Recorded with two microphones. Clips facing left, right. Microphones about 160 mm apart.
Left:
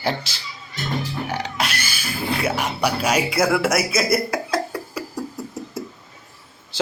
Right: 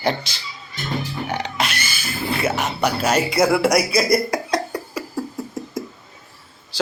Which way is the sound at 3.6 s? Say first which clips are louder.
Right 3 dB; 5° left (ahead or behind).